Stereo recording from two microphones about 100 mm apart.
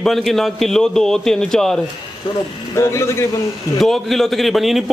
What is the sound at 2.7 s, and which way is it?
Speech, 25° left (ahead or behind).